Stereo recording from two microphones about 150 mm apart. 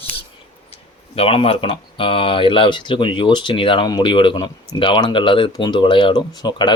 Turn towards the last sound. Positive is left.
turn(degrees=30)  # may be behind; listen again after turning